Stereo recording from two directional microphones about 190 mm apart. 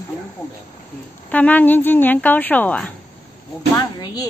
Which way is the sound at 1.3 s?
10° left (ahead or behind).